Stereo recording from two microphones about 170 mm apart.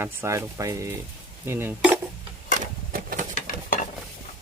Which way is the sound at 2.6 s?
55° right (ahead or behind).